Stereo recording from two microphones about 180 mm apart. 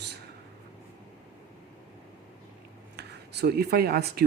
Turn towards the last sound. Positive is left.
turn(degrees=-60)  # may be behind; listen again after turning